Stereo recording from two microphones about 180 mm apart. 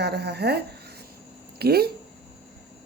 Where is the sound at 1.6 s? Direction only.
60° right (ahead or behind).